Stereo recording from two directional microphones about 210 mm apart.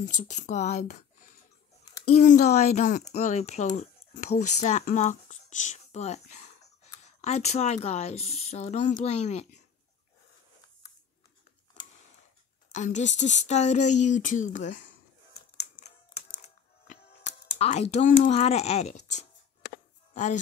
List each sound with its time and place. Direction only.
0.0 s speech: 35° left (ahead or behind)
2.1 s speech: 35° left (ahead or behind)
12.7 s speech: 35° left (ahead or behind)
15.8 s music: 30° left (ahead or behind)